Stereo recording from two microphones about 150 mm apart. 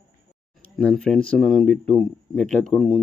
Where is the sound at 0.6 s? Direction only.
5° left (ahead or behind).